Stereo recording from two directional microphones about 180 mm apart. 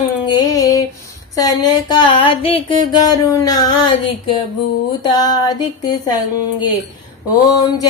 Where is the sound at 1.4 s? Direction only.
20° left (ahead or behind).